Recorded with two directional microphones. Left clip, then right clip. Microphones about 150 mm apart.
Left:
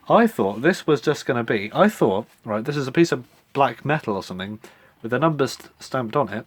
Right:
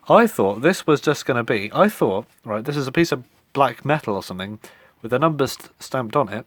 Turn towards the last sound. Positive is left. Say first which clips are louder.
# right 1 dB
turn(degrees=-45)  # may be behind; listen again after turning